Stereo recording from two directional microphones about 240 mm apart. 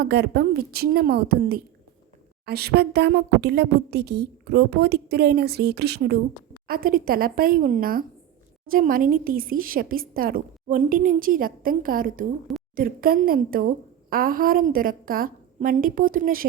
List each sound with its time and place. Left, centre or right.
0.0 s a woman's voice: right